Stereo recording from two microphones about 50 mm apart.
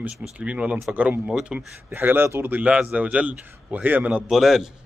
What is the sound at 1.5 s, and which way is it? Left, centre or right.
Speech, centre.